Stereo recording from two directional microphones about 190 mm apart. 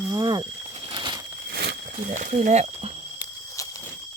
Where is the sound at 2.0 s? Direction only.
45° right (ahead or behind).